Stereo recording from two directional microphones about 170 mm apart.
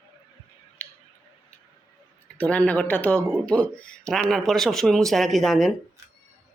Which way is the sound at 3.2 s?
15° right (ahead or behind).